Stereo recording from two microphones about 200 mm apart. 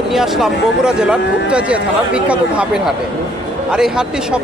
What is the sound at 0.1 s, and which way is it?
Speech, centre (ahead or behind).